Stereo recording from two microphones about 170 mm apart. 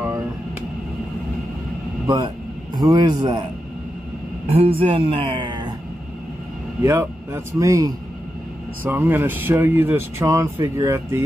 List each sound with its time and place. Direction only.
2.0 s speech: 25° right (ahead or behind)
4.6 s speech: 35° right (ahead or behind)
6.8 s speech: 15° right (ahead or behind)